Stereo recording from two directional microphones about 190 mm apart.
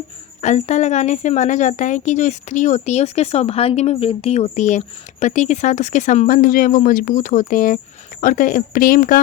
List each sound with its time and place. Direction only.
0.4 s a woman's voice: 35° left (ahead or behind)